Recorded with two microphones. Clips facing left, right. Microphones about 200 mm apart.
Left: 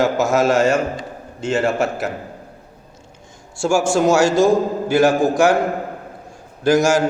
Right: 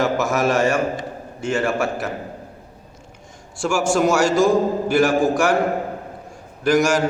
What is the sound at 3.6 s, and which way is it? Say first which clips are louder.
A man's voice: left 2 dB; 25° left (ahead or behind).